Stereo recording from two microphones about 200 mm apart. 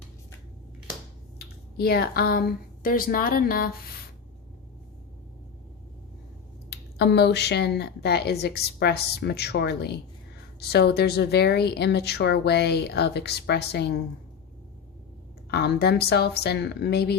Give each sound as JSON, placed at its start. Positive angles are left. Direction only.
{"t": 1.8, "sound": "speech", "side_deg": 50}
{"t": 6.7, "sound": "a woman's voice", "side_deg": 55}
{"t": 15.4, "sound": "speech", "side_deg": 55}